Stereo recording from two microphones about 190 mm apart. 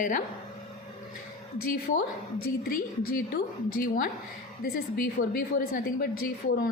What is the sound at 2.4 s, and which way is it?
A woman's voice, 50° left (ahead or behind).